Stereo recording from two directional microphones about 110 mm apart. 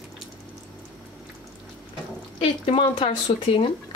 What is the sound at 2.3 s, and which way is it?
Speech, 55° left (ahead or behind).